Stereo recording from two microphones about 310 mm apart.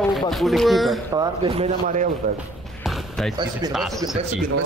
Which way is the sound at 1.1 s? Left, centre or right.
Centre.